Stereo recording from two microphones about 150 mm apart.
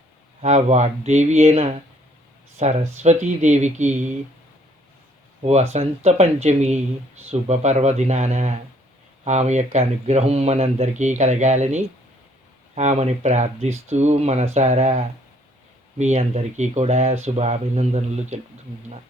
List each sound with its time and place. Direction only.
0.4 s speech: 50° right (ahead or behind)
5.4 s speech: 45° right (ahead or behind)